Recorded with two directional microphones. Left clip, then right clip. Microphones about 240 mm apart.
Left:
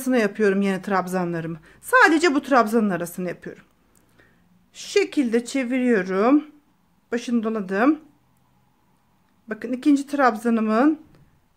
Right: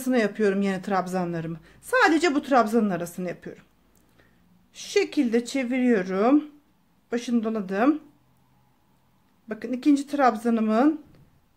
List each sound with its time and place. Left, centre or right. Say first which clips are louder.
0.0 s speech: left 3 dB; centre
4.7 s speech: left 3 dB; centre
9.5 s speech: left 2 dB; centre